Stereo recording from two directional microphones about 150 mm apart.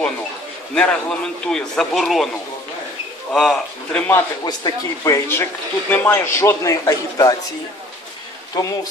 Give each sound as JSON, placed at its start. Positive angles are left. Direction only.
{"t": 0.7, "sound": "a man's voice", "side_deg": 5}
{"t": 3.3, "sound": "a man's voice", "side_deg": 0}
{"t": 4.1, "sound": "speech", "side_deg": 25}
{"t": 8.6, "sound": "speech", "side_deg": 25}